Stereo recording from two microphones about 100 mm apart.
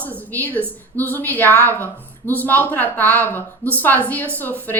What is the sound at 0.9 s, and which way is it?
Speech, 20° left (ahead or behind).